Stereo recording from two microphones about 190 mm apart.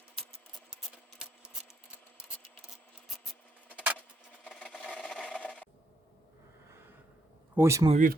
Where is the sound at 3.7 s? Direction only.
10° right (ahead or behind).